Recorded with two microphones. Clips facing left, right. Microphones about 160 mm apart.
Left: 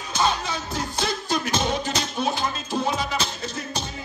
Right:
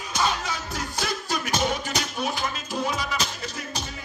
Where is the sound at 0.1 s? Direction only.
25° left (ahead or behind).